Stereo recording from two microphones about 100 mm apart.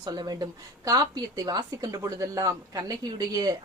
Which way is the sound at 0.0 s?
45° right (ahead or behind).